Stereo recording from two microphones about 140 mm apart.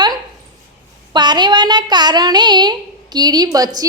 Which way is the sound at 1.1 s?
30° right (ahead or behind).